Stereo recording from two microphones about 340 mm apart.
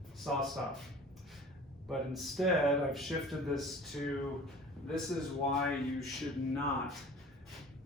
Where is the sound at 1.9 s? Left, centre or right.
Centre.